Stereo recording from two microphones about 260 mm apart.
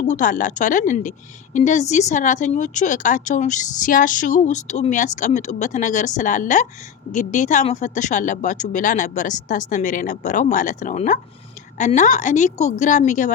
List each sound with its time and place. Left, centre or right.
0.1 s speech: left